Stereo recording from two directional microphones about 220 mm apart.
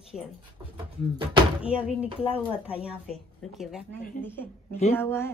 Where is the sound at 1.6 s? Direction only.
5° right (ahead or behind).